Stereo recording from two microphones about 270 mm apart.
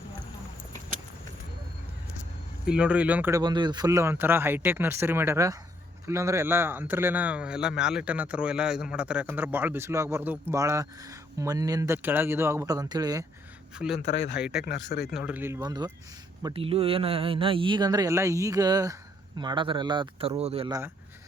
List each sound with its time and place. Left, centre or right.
2.6 s a man's voice: centre
13.7 s speech: centre
14.0 s speech: left
14.3 s speech: centre
14.6 s speech: left
15.0 s a man's voice: centre